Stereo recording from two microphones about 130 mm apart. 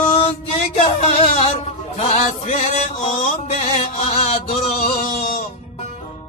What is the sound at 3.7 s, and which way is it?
Chant, 55° left (ahead or behind).